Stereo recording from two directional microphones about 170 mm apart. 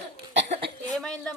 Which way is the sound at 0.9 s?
5° left (ahead or behind).